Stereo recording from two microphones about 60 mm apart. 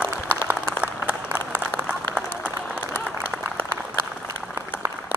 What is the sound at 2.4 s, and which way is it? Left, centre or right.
Applause, right.